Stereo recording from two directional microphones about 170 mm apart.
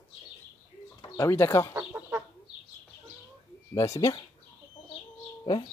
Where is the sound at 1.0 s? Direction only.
20° left (ahead or behind).